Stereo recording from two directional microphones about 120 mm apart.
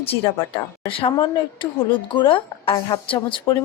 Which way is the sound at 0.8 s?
50° left (ahead or behind).